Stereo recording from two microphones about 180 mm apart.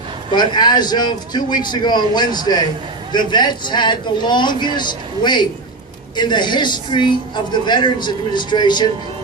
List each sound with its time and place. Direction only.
0.3 s a man's voice: 25° left (ahead or behind)